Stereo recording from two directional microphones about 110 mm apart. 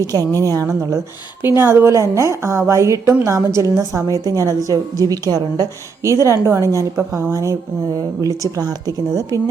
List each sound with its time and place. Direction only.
0.0 s a woman's voice: 30° right (ahead or behind)
8.5 s a woman's voice: 35° right (ahead or behind)